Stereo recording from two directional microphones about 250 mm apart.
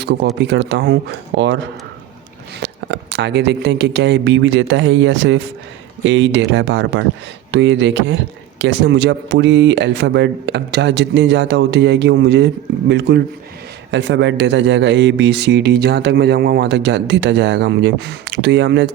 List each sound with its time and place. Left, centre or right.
0.0 s speech: right